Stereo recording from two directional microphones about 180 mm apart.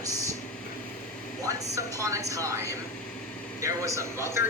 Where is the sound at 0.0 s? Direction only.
20° right (ahead or behind).